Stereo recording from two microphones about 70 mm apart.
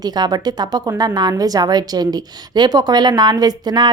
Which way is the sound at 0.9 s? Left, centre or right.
Right.